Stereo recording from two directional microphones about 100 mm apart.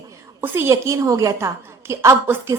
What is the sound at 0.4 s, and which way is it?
A woman's voice, 25° right (ahead or behind).